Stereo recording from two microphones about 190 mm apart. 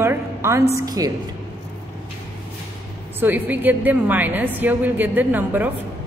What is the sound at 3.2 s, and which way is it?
A woman's voice, 10° right (ahead or behind).